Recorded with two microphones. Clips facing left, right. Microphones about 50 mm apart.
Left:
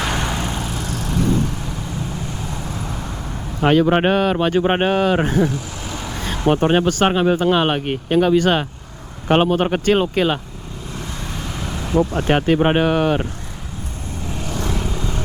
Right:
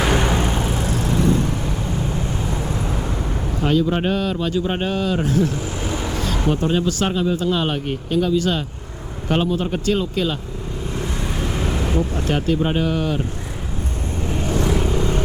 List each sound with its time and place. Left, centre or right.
0.0 s vehicle: centre
0.3 s vehicle: right
2.2 s vehicle: right
2.7 s vehicle: centre
3.6 s speech: left
5.8 s vehicle: centre
6.2 s a sound: left
6.5 s speech: left
10.9 s vehicle: centre
11.9 s speech: left
14.3 s vehicle: right
14.6 s vehicle: centre
14.8 s vehicle: right